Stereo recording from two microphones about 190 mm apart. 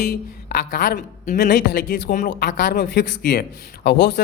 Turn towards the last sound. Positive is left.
turn(degrees=60)  # may be behind; listen again after turning